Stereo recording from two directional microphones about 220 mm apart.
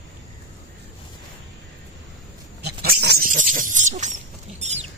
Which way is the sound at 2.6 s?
45° right (ahead or behind).